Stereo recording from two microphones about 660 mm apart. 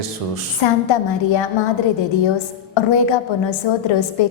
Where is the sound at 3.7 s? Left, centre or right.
Left.